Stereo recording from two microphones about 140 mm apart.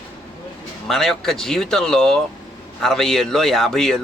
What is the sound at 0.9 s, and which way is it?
A man's voice, centre (ahead or behind).